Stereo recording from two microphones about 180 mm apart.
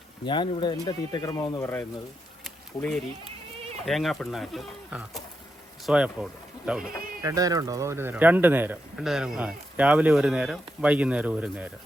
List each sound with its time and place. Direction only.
0.3 s speech: 25° left (ahead or behind)
2.4 s a sound: centre (ahead or behind)
3.8 s speech: centre (ahead or behind)
7.2 s speech: 20° right (ahead or behind)